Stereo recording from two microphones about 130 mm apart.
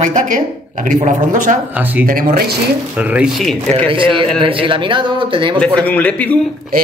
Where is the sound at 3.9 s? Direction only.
40° right (ahead or behind).